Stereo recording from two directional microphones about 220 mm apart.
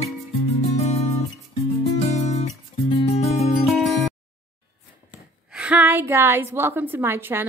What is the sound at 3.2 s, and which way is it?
Music, 30° left (ahead or behind).